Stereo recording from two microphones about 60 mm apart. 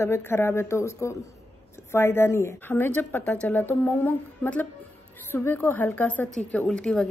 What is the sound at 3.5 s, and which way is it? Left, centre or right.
A woman's voice, left.